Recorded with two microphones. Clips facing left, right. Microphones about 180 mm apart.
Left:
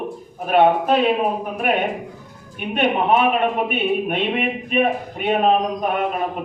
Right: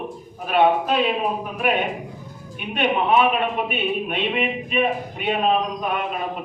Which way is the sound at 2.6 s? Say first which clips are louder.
Left 2 dB; 50° left (ahead or behind).